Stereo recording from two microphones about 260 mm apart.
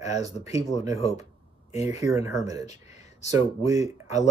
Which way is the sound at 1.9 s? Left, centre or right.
Centre.